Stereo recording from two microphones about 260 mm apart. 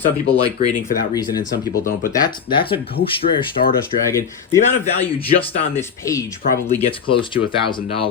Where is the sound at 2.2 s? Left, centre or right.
Centre.